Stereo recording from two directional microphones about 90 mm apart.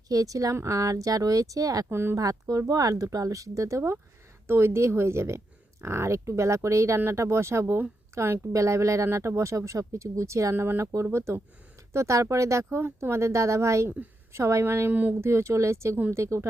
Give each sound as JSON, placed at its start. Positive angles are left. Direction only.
{"t": 0.1, "sound": "speech", "side_deg": -40}
{"t": 1.9, "sound": "speech", "side_deg": -25}
{"t": 2.1, "sound": "speech", "side_deg": -40}